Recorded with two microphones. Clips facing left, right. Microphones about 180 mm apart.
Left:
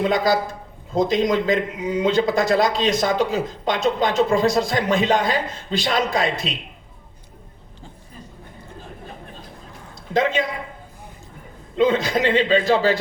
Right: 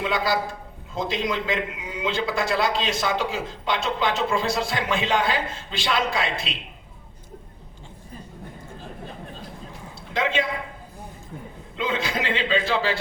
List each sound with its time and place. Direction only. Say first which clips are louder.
0.0 s a man's voice: left 5 dB; 40° left (ahead or behind)
10.1 s a woman's voice: left 5 dB; 40° left (ahead or behind)
11.8 s a man's voice: left 8 dB; 40° left (ahead or behind)